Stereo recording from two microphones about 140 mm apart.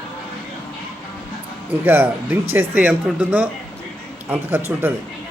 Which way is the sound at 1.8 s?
15° right (ahead or behind).